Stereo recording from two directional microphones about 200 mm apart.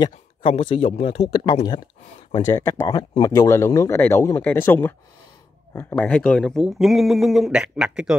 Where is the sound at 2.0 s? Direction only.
30° left (ahead or behind).